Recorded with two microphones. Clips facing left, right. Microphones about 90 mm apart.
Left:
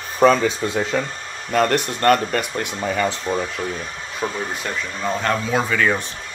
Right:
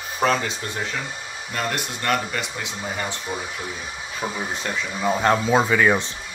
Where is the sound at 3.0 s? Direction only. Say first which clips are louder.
Left 9 dB; 90° left.